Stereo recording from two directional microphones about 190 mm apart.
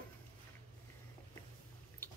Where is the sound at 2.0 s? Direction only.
10° left (ahead or behind).